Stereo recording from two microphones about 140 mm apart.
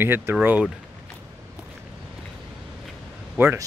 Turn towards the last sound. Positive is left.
turn(degrees=-15)  # may be behind; listen again after turning